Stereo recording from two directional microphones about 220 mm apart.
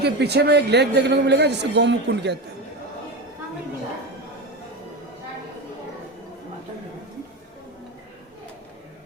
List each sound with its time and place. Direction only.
0.0 s a man's voice: 50° right (ahead or behind)